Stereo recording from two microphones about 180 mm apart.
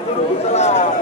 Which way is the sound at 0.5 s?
40° left (ahead or behind).